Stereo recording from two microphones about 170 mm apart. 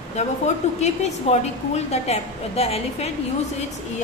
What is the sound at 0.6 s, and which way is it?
A woman's voice, 40° left (ahead or behind).